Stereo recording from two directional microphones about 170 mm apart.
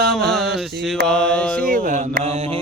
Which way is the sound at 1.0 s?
5° left (ahead or behind).